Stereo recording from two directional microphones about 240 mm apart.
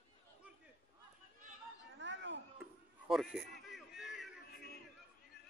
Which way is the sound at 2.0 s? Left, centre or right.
Right.